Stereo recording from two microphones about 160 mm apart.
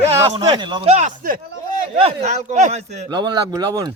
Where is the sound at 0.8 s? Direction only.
45° right (ahead or behind).